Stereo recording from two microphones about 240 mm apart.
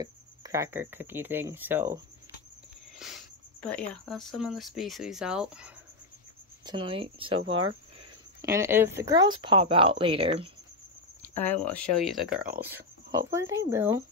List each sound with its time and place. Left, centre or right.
0.0 s speech: centre
3.0 s a sound: centre
3.6 s speech: centre
6.6 s speech: centre
11.3 s speech: centre